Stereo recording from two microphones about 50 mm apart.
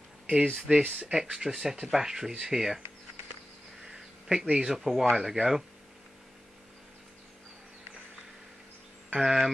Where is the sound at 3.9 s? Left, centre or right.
Centre.